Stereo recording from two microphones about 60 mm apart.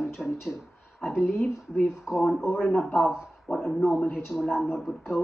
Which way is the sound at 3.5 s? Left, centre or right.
Centre.